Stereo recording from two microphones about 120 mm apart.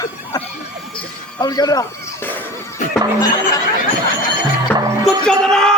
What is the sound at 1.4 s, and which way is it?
Speech, 35° left (ahead or behind).